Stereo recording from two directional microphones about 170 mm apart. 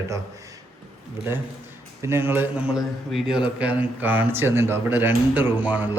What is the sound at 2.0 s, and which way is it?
A man's voice, 15° right (ahead or behind).